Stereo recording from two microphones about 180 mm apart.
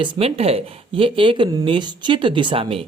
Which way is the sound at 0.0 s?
30° right (ahead or behind).